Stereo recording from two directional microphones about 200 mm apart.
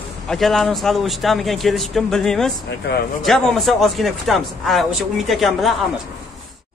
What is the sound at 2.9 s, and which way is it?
Speech, 55° left (ahead or behind).